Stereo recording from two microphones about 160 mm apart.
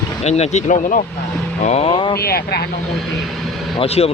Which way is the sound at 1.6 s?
40° left (ahead or behind).